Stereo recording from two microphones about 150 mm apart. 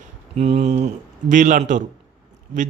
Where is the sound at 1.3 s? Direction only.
60° right (ahead or behind).